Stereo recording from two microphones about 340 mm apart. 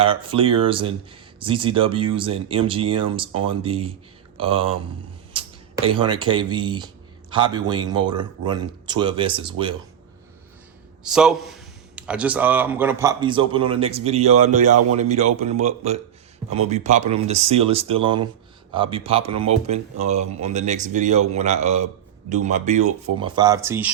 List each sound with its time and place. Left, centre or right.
0.0 s a man's voice: centre
5.3 s a sound: centre
6.0 s a man's voice: centre
11.0 s a man's voice: centre